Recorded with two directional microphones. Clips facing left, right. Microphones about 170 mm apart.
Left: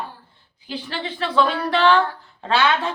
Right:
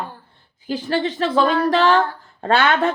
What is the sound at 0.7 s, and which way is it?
Speech, 45° right (ahead or behind).